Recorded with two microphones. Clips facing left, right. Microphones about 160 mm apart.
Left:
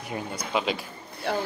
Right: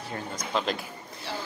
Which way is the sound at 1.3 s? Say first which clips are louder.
Left 8 dB; 55° left (ahead or behind).